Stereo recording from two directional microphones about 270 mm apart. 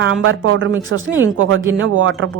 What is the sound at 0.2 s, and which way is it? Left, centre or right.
Speech, right.